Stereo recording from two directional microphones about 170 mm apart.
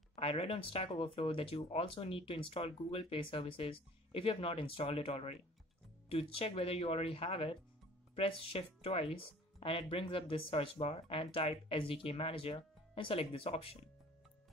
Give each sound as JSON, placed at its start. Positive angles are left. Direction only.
{"t": 0.1, "sound": "speech", "side_deg": 35}